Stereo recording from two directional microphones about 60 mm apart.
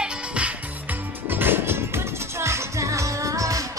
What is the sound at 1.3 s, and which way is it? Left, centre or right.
Music, right.